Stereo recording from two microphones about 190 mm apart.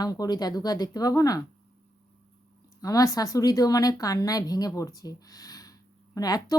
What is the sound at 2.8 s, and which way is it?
Speech, 20° left (ahead or behind).